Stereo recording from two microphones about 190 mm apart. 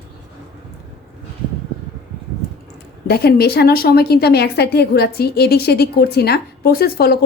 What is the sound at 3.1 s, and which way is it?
A woman's voice, 55° left (ahead or behind).